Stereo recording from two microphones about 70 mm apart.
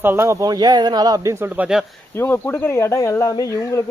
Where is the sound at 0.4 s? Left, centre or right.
Right.